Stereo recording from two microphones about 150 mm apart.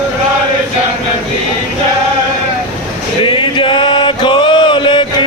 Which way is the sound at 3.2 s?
35° left (ahead or behind).